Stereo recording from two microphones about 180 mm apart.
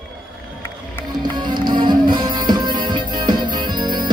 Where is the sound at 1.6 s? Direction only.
25° right (ahead or behind).